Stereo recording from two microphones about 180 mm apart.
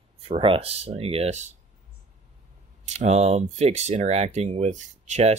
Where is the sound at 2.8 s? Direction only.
40° right (ahead or behind).